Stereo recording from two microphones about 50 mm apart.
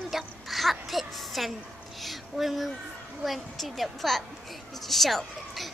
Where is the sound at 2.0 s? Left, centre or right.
Centre.